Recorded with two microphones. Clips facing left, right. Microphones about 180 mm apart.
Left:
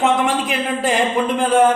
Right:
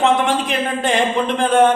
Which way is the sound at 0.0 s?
Centre (ahead or behind).